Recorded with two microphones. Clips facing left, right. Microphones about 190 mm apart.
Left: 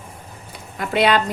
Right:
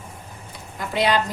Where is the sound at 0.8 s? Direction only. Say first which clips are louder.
Left 4 dB; 65° left (ahead or behind).